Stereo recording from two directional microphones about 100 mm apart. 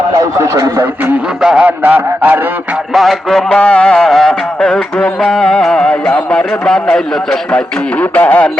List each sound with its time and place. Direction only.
0.1 s speech: 35° right (ahead or behind)
1.4 s a man's voice: 5° right (ahead or behind)
1.6 s a man's voice: 15° right (ahead or behind)
2.9 s a man's voice: centre (ahead or behind)
8.1 s a man's voice: 15° left (ahead or behind)